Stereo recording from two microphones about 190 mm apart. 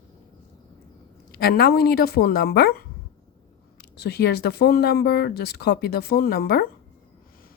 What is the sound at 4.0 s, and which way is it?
A woman's voice, 60° left (ahead or behind).